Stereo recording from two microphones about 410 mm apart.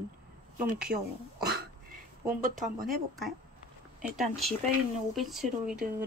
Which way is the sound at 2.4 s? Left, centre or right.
Centre.